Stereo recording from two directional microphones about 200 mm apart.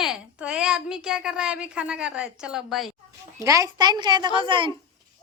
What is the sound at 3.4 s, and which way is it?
A woman's voice, 15° right (ahead or behind).